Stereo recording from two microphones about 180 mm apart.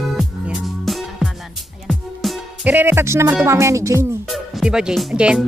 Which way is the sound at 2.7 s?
10° right (ahead or behind).